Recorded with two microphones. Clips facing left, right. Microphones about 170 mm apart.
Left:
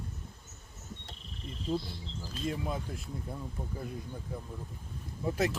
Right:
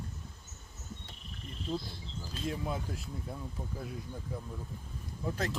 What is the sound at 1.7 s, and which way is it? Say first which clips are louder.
Speech: left 3 dB; 15° left (ahead or behind).